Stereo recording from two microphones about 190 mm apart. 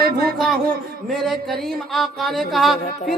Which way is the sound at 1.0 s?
Centre (ahead or behind).